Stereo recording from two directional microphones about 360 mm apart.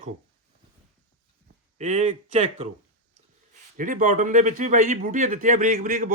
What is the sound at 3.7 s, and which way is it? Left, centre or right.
Speech, right.